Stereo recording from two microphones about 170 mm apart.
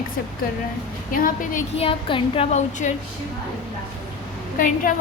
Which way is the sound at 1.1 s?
55° left (ahead or behind).